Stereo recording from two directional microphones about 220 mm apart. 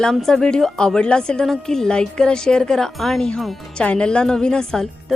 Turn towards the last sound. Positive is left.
turn(degrees=0)  # may be behind; listen again after turning